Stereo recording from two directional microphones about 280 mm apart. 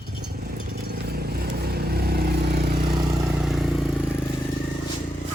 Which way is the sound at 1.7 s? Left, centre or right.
Right.